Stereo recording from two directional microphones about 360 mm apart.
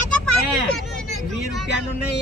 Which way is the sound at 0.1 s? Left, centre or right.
Centre.